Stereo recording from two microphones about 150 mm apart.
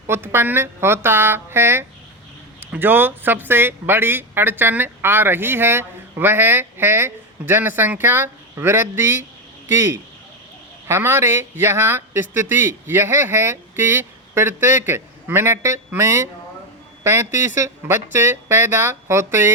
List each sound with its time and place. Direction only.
0.1 s speech: 15° right (ahead or behind)
10.8 s speech: 15° right (ahead or behind)